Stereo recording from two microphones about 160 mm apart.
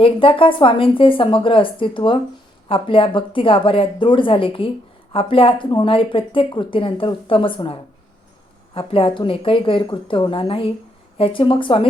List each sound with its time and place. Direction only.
0.0 s speech: 35° left (ahead or behind)